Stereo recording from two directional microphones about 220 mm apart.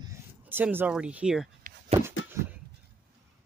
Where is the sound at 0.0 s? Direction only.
10° right (ahead or behind).